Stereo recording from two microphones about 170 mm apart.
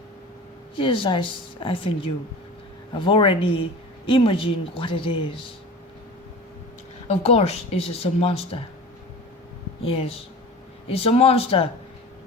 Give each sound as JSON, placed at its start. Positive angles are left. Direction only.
{"t": 0.8, "sound": "speech", "side_deg": 30}
{"t": 7.1, "sound": "speech", "side_deg": 40}
{"t": 9.8, "sound": "speech", "side_deg": 35}